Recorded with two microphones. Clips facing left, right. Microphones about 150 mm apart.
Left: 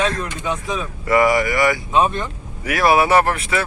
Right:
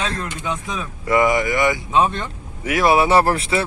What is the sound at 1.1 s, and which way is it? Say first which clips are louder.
Speech: left 1 dB; 20° right (ahead or behind).